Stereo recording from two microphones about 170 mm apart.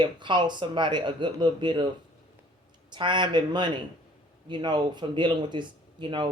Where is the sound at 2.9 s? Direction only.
25° right (ahead or behind).